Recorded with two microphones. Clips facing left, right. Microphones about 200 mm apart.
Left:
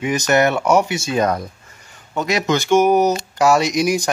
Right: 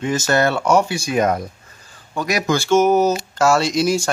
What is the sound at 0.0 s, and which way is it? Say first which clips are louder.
Speech: left 2 dB; 20° left (ahead or behind).